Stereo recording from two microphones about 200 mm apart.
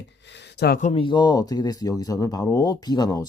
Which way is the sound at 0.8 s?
30° left (ahead or behind).